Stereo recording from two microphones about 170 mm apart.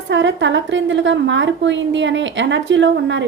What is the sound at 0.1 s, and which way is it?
A woman's voice, 90° right.